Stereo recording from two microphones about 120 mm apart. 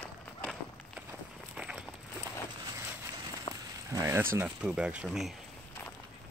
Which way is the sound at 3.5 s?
45° left (ahead or behind).